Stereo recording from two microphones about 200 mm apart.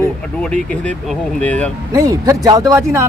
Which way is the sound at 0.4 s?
5° left (ahead or behind).